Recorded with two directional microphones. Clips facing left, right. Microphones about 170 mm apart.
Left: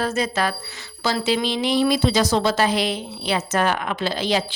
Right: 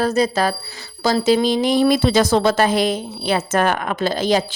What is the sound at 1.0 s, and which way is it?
Speech, 40° right (ahead or behind).